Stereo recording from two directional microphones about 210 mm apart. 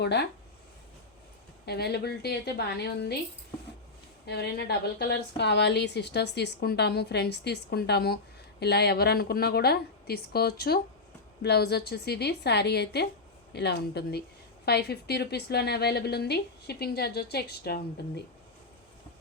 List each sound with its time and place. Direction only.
0.0 s a woman's voice: 55° left (ahead or behind)
1.6 s a woman's voice: 50° left (ahead or behind)
4.3 s a woman's voice: 50° left (ahead or behind)